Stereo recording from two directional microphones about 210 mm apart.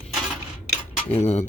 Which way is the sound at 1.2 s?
30° left (ahead or behind).